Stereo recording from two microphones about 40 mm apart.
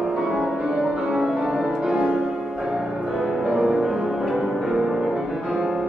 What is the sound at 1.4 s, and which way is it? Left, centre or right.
Music, centre.